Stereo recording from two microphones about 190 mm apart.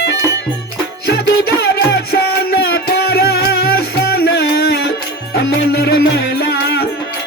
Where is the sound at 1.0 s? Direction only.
60° left (ahead or behind).